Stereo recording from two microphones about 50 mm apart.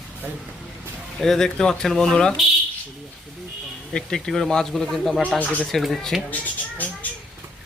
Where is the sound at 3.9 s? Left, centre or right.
Centre.